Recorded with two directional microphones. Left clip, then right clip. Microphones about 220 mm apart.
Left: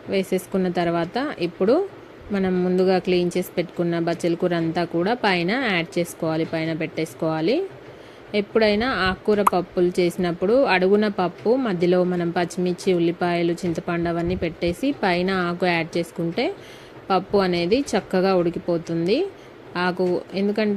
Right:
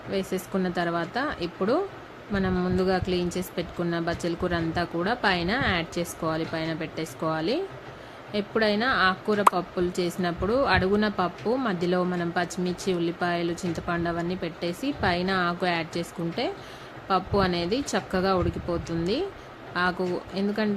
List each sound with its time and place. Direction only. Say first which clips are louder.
0.1 s speech: left 6 dB; 20° left (ahead or behind)